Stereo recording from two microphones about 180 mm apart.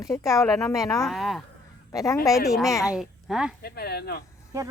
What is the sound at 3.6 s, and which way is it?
Speech, 60° left (ahead or behind).